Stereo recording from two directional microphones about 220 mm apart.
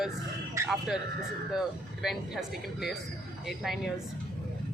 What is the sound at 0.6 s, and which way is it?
Speech, 15° right (ahead or behind).